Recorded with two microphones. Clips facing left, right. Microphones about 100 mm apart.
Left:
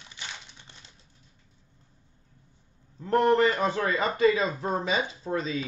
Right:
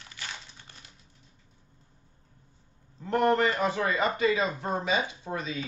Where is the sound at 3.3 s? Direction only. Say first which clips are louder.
Left 3 dB; 30° left (ahead or behind).